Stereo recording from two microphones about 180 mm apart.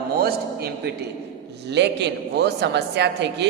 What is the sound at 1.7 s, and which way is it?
A woman's voice, 70° right (ahead or behind).